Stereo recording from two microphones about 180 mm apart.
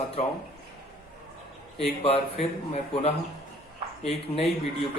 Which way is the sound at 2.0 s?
35° left (ahead or behind).